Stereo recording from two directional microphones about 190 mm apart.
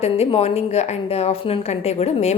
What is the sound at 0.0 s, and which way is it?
A woman's voice, 35° left (ahead or behind).